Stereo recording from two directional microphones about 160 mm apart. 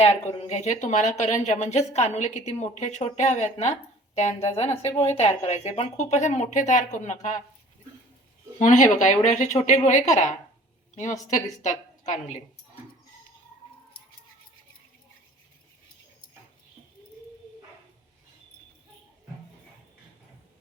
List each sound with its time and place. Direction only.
0.0 s speech: 40° left (ahead or behind)
8.5 s speech: 50° left (ahead or behind)